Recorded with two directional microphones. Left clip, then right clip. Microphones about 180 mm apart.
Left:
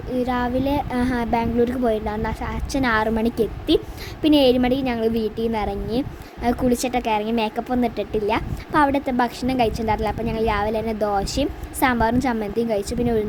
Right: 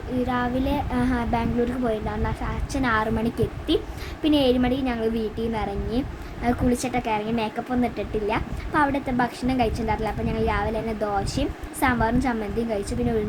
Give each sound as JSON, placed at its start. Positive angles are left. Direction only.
{"t": 0.3, "sound": "a woman's voice", "side_deg": 35}